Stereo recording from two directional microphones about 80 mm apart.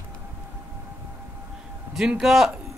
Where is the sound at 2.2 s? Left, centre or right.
Centre.